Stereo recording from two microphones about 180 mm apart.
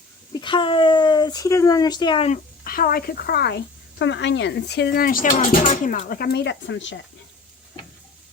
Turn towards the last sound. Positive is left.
turn(degrees=90)